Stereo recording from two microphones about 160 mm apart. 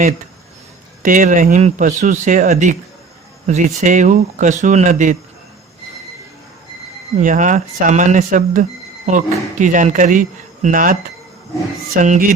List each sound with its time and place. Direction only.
1.0 s speech: 55° right (ahead or behind)
7.2 s speech: 55° right (ahead or behind)
11.9 s speech: 55° right (ahead or behind)